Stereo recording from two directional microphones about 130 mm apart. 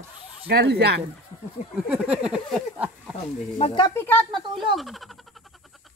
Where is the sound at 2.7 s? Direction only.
10° right (ahead or behind).